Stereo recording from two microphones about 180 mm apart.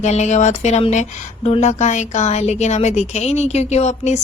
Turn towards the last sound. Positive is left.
turn(degrees=40)  # may be behind; listen again after turning